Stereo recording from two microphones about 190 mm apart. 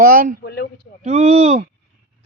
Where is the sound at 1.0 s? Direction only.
35° right (ahead or behind).